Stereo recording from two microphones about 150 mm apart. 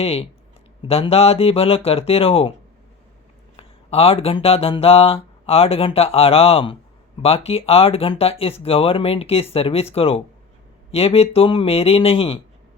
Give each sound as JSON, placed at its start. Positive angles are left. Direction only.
{"t": 0.0, "sound": "speech", "side_deg": 40}
{"t": 3.6, "sound": "speech", "side_deg": 40}